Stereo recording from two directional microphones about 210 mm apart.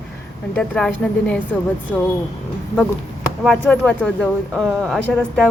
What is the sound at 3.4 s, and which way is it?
Speech, 5° left (ahead or behind).